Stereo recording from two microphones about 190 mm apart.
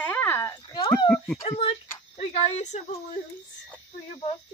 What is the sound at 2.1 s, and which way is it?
Speech, 35° left (ahead or behind).